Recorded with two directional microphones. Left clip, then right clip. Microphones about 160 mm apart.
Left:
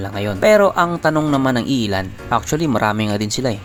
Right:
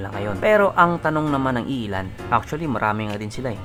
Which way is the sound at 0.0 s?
35° left (ahead or behind).